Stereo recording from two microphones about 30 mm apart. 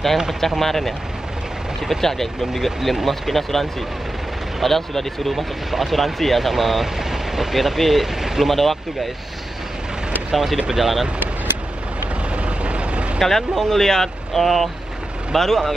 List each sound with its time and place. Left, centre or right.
0.6 s speech: centre
2.5 s speech: centre
5.3 s speech: centre
7.0 s vehicle: centre
7.5 s speech: centre
10.3 s speech: centre
12.4 s vehicle: right
13.2 s speech: centre